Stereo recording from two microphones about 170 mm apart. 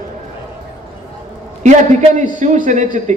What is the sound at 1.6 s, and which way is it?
Speech, 45° right (ahead or behind).